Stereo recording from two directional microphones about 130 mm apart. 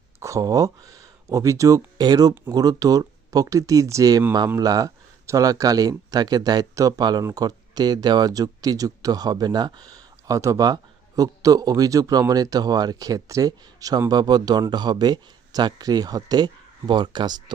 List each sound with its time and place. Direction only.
0.2 s a man's voice: 25° right (ahead or behind)